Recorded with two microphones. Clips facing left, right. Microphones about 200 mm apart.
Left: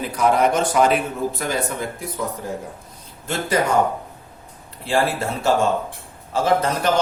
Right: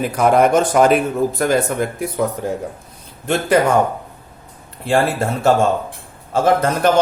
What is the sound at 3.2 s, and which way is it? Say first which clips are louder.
Speech: right 6 dB; 60° right (ahead or behind).